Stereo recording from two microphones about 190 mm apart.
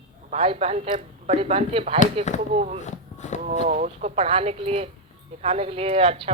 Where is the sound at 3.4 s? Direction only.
40° right (ahead or behind).